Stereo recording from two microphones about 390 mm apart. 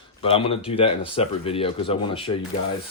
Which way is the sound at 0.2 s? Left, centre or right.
Centre.